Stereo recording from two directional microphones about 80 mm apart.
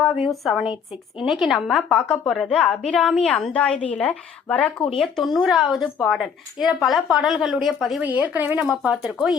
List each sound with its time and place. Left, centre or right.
0.0 s a woman's voice: centre
4.9 s a woman's voice: centre
8.0 s speech: right
8.5 s a woman's voice: centre